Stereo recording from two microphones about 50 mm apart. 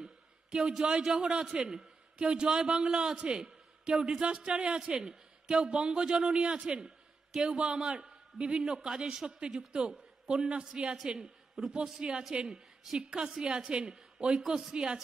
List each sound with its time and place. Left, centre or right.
0.0 s a man's voice: centre
11.6 s a man's voice: centre
14.4 s speech: centre
14.7 s a man's voice: centre